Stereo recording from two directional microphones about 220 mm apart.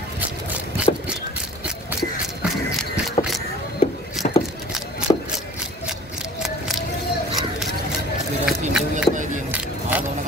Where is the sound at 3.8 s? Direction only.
25° left (ahead or behind).